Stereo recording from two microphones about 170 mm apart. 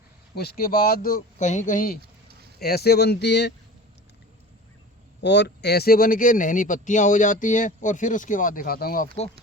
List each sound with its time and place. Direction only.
0.3 s speech: 65° left (ahead or behind)
2.6 s speech: 65° left (ahead or behind)
5.2 s speech: 90° left; by 9.0 s 60° left (ahead or behind)